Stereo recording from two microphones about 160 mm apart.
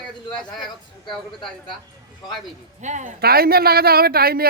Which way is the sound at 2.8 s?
50° right (ahead or behind).